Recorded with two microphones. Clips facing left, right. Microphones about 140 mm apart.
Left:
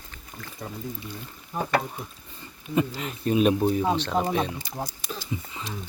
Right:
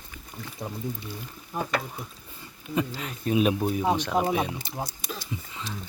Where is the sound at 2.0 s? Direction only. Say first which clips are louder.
Left 1 dB; centre (ahead or behind).